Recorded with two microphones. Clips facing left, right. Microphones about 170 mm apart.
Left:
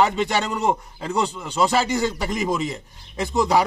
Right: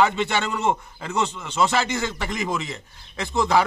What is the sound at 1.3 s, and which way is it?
Speech, 10° left (ahead or behind).